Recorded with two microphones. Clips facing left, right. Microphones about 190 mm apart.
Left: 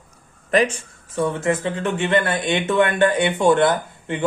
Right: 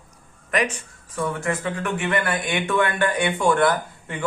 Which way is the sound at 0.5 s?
30° left (ahead or behind).